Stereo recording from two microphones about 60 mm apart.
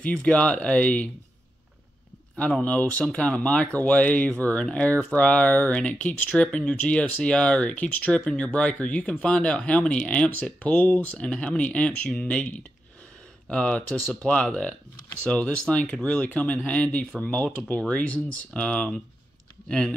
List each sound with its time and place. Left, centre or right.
0.0 s speech: centre
2.6 s speech: left